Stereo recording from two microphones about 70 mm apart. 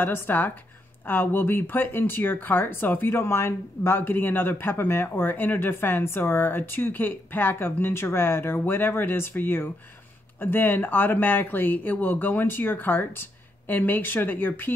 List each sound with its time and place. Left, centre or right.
0.0 s speech: left